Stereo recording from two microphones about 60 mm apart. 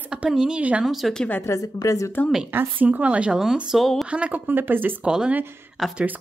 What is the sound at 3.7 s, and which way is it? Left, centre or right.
Speech, centre.